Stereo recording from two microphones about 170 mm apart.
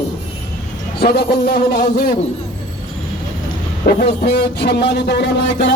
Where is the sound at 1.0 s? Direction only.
70° left (ahead or behind).